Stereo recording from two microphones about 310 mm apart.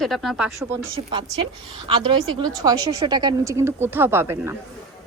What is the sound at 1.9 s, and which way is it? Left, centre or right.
A woman's voice, centre.